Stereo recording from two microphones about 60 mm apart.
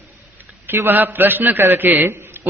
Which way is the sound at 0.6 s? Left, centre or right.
Right.